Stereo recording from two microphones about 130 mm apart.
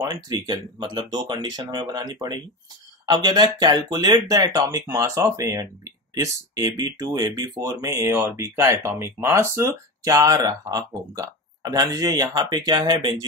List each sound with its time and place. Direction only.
0.0 s speech: 35° right (ahead or behind)